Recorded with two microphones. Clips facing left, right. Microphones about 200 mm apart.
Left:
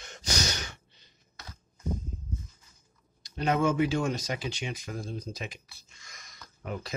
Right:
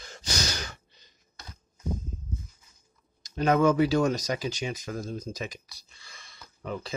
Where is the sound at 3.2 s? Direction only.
45° right (ahead or behind).